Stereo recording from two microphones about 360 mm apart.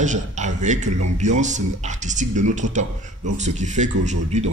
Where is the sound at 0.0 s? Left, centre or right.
Centre.